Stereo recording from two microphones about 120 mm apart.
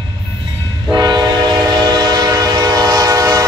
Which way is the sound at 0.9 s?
35° right (ahead or behind).